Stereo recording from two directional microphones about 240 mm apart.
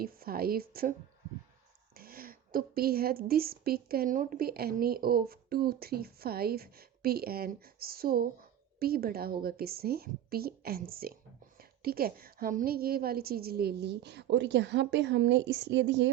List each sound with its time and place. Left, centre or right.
0.0 s a woman's voice: right
2.0 s a woman's voice: right